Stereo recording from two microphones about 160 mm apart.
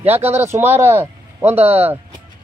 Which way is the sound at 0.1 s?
15° right (ahead or behind).